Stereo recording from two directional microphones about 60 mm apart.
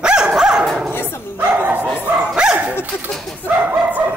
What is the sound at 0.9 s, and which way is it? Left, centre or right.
Dog, left.